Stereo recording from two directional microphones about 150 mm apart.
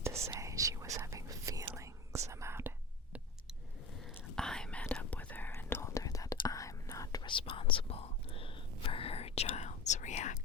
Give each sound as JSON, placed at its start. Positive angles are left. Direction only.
{"t": 0.3, "sound": "whispering", "side_deg": -20}
{"t": 4.4, "sound": "whispering", "side_deg": 5}